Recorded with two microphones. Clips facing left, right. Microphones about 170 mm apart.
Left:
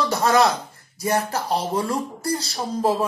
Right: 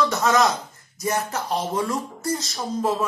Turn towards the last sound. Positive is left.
turn(degrees=30)  # may be behind; listen again after turning